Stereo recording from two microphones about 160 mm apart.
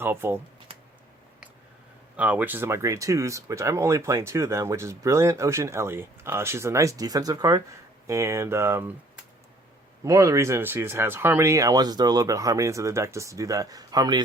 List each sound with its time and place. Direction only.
0.0 s speech: 15° right (ahead or behind)
2.1 s speech: 10° right (ahead or behind)
10.0 s speech: 20° right (ahead or behind)